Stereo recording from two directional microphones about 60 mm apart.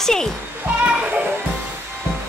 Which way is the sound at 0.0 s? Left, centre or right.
Centre.